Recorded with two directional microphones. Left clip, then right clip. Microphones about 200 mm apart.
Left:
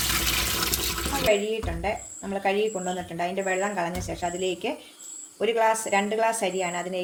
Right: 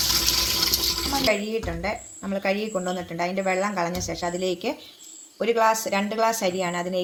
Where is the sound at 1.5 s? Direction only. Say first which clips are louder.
Right 1 dB; 35° right (ahead or behind).